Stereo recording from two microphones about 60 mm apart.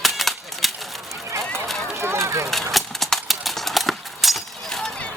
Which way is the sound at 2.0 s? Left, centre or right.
Right.